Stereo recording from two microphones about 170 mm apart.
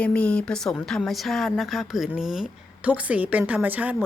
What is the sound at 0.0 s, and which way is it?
A woman's voice, 5° left (ahead or behind).